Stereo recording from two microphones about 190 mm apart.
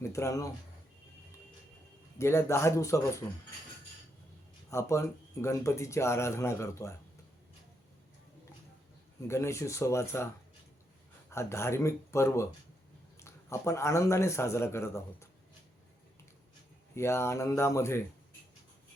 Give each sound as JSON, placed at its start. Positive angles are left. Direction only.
{"t": 0.0, "sound": "speech", "side_deg": 15}
{"t": 2.1, "sound": "speech", "side_deg": 15}
{"t": 4.7, "sound": "speech", "side_deg": 15}
{"t": 9.2, "sound": "speech", "side_deg": 15}
{"t": 11.3, "sound": "speech", "side_deg": 15}
{"t": 16.9, "sound": "speech", "side_deg": 15}